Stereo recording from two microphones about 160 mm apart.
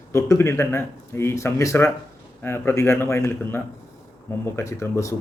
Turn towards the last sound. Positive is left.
turn(degrees=20)  # may be behind; listen again after turning